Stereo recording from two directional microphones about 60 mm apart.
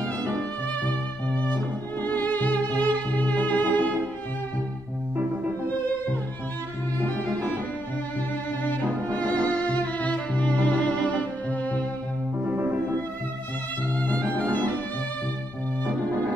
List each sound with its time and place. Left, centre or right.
0.4 s music: left
7.1 s cello: left
8.6 s music: left
12.4 s music: right
13.9 s music: left